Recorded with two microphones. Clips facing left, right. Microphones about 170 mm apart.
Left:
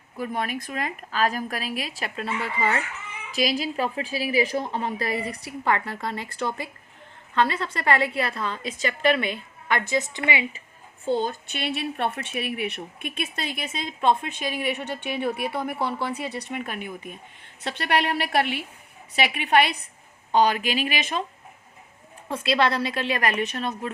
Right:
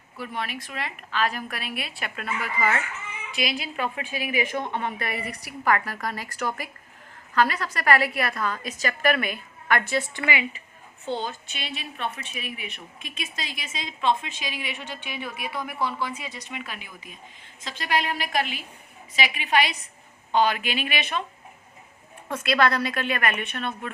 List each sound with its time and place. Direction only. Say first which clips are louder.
0.2 s a woman's voice: left 4 dB; 45° left (ahead or behind); by 10.4 s 20° left (ahead or behind)
11.0 s a woman's voice: left 5 dB; 45° left (ahead or behind); by 16.5 s 65° left (ahead or behind)
16.5 s a woman's voice: left 6 dB; 50° left (ahead or behind)
20.3 s a woman's voice: left 2 dB; 40° left (ahead or behind)
22.3 s a woman's voice: even; 30° left (ahead or behind)